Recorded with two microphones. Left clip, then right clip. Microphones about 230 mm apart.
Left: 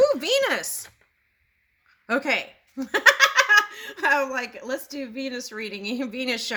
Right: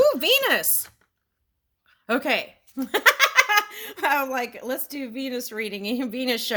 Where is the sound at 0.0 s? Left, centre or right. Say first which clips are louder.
Right 1 dB; right.